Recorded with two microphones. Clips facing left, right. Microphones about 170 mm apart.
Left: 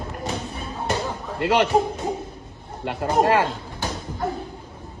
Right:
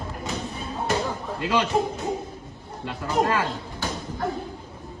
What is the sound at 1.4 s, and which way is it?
Speech, 65° left (ahead or behind).